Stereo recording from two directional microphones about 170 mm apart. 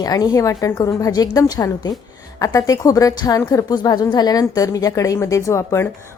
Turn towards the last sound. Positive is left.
turn(degrees=15)  # may be behind; listen again after turning